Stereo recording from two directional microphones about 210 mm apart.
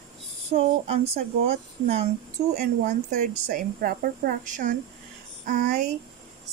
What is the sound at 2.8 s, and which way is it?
Speech, 35° right (ahead or behind).